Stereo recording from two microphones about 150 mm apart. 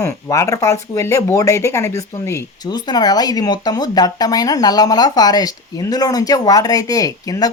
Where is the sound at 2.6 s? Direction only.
30° left (ahead or behind).